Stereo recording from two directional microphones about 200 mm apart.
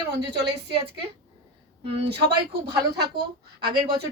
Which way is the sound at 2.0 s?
55° right (ahead or behind).